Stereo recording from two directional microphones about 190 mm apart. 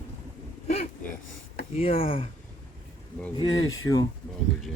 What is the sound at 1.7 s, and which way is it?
Speech, 30° left (ahead or behind).